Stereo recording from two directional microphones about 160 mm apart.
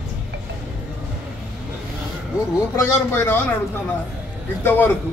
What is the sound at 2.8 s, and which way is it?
Speech, 15° left (ahead or behind).